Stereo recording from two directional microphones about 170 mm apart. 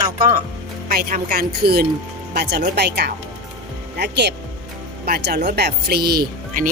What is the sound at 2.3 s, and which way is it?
Speech, 75° right (ahead or behind).